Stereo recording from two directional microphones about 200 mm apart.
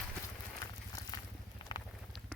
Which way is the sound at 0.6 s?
20° left (ahead or behind).